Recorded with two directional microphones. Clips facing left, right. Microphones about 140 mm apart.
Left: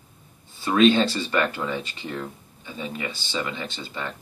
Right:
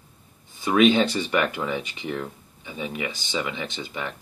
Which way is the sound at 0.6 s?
15° right (ahead or behind).